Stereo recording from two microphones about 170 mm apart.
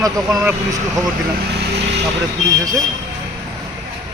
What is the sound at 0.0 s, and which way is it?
Speech, 20° right (ahead or behind).